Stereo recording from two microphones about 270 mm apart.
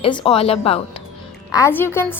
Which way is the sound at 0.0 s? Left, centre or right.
Centre.